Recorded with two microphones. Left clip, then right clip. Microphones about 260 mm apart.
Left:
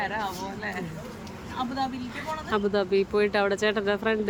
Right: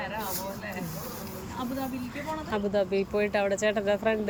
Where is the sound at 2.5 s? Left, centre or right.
Centre.